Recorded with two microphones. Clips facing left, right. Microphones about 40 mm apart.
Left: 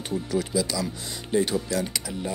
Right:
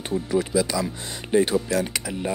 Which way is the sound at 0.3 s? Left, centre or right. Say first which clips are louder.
Right 4 dB; right.